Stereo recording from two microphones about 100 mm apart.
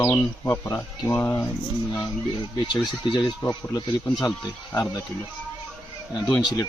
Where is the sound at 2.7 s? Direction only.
50° left (ahead or behind).